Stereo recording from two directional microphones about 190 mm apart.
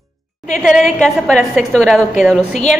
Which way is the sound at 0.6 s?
Centre (ahead or behind).